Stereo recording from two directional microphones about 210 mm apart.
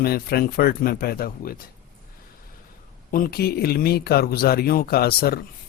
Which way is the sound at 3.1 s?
45° left (ahead or behind).